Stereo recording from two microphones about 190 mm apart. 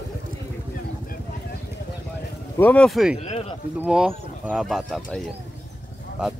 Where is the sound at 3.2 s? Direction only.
35° left (ahead or behind).